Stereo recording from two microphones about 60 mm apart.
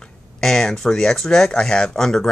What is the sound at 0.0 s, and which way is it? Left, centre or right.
Speech, centre.